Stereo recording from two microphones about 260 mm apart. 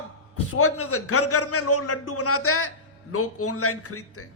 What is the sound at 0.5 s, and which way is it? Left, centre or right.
A man's voice, left.